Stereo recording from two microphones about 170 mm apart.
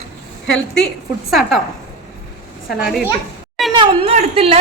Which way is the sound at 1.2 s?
Centre (ahead or behind).